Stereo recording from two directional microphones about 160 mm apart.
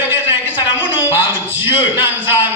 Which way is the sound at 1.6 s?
15° right (ahead or behind).